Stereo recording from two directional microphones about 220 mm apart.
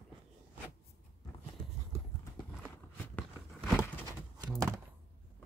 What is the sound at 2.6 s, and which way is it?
Walk, 5° left (ahead or behind).